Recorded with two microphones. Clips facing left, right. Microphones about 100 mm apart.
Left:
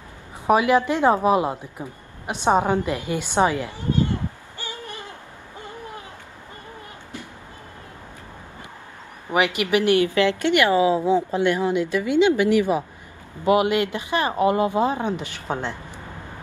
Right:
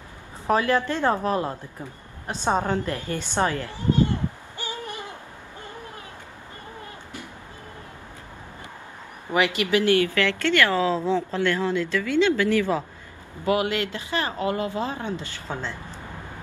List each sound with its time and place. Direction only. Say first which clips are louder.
0.5 s a woman's voice: left 4 dB; 15° left (ahead or behind)
4.6 s hoot: right 2 dB; 20° right (ahead or behind)
9.3 s a woman's voice: left 2 dB; 20° left (ahead or behind)